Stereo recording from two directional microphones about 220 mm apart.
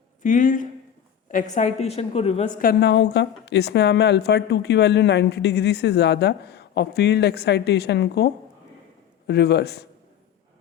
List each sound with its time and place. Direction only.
0.2 s a woman's voice: 35° left (ahead or behind)
2.6 s a woman's voice: 45° left (ahead or behind)